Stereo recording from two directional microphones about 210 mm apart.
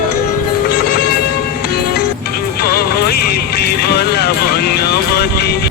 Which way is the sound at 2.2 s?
45° left (ahead or behind).